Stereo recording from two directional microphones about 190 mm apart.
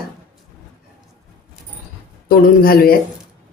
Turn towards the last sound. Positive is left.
turn(degrees=50)  # may be behind; listen again after turning